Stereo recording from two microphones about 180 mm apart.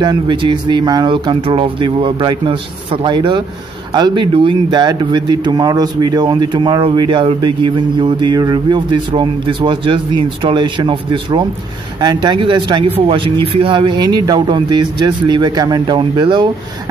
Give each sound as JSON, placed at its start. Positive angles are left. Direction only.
{"t": 0.0, "sound": "speech", "side_deg": -25}